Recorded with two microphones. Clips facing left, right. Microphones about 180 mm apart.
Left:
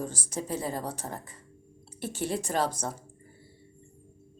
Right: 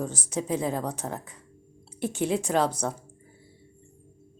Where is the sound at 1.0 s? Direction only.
90° right.